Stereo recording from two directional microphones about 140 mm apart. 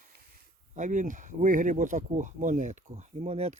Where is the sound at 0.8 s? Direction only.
65° right (ahead or behind).